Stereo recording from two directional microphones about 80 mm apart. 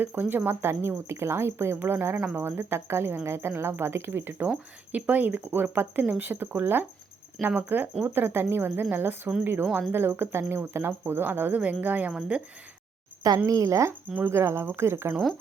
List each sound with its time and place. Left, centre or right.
0.0 s speech: right
13.5 s speech: right
15.1 s speech: centre